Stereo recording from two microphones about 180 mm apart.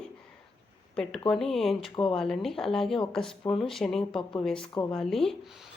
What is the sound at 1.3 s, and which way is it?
Speech, centre (ahead or behind).